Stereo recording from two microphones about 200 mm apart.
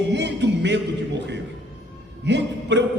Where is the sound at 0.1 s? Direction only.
60° right (ahead or behind).